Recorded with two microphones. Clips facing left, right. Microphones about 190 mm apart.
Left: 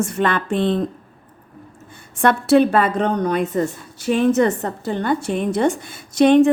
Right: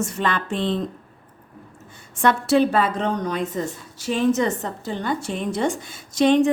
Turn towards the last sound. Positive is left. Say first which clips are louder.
# left 4 dB
turn(degrees=60)  # may be behind; listen again after turning